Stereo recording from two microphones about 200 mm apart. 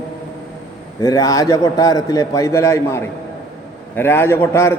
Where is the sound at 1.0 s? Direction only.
15° left (ahead or behind).